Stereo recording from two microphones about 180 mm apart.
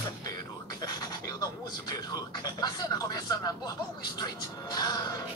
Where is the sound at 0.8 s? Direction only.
20° left (ahead or behind).